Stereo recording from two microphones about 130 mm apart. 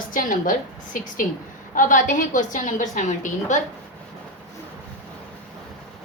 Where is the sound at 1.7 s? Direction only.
90° left; by 3.6 s 75° left (ahead or behind).